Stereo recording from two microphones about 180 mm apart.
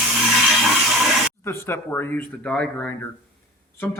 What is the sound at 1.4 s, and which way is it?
Speech, 15° left (ahead or behind).